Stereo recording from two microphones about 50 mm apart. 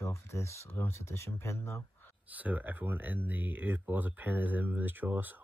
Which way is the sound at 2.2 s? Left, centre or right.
Right.